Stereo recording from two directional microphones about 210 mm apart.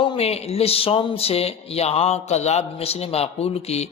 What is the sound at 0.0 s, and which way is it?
A man's voice, 30° left (ahead or behind).